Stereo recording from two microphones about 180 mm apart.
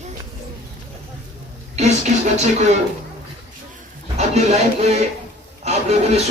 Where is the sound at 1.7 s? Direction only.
40° right (ahead or behind).